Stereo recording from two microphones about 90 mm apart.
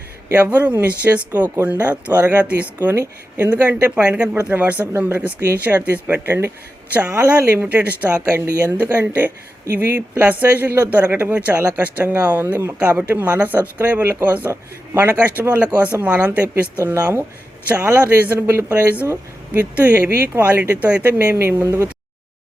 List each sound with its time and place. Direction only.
0.3 s a woman's voice: 20° right (ahead or behind)